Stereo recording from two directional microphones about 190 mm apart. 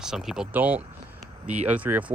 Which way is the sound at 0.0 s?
Centre (ahead or behind).